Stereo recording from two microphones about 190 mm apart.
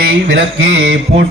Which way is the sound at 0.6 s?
90° right.